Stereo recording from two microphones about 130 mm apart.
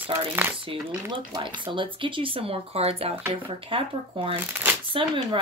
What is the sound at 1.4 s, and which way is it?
Speech, 40° right (ahead or behind).